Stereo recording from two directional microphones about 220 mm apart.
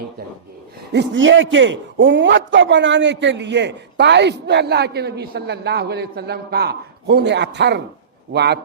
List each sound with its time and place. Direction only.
0.9 s a man's voice: 60° right (ahead or behind)